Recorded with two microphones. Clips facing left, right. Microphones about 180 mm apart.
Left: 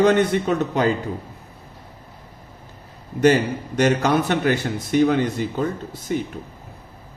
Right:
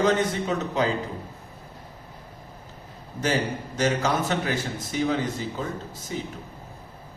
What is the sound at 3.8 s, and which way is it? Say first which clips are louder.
A man's voice: left 6 dB; 65° left (ahead or behind).